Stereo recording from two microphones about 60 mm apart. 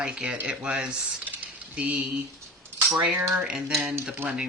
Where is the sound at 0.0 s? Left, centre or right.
Centre.